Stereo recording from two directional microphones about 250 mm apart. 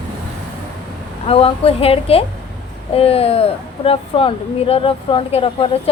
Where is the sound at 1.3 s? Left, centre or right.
Left.